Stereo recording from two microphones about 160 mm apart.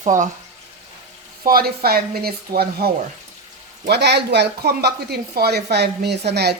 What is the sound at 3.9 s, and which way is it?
Speech, 90° right.